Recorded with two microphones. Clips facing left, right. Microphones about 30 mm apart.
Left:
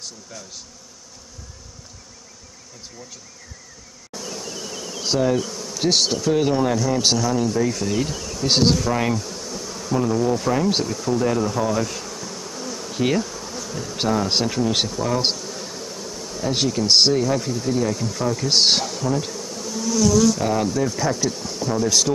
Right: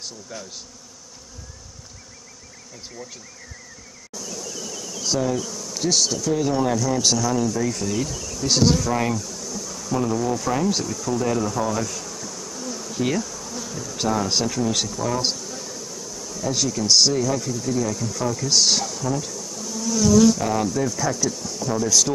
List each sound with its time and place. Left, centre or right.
0.0 s bee: centre
4.1 s bee: left
6.5 s a man's voice: left
9.1 s bee: left
13.7 s speech: left
18.2 s bee: left
20.3 s a man's voice: left